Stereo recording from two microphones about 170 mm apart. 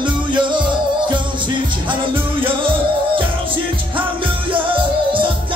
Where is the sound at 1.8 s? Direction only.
30° right (ahead or behind).